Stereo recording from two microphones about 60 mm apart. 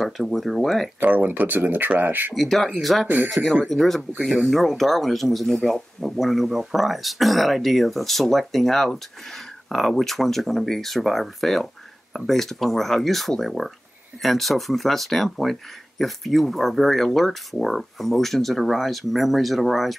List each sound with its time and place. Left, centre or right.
0.0 s speech: centre
1.0 s speech: right
2.3 s speech: centre